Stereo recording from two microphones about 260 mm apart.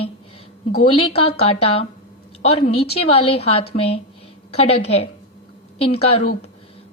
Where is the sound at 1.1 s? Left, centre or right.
Left.